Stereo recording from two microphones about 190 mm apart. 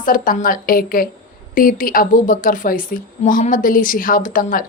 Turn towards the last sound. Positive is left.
turn(degrees=45)  # may be behind; listen again after turning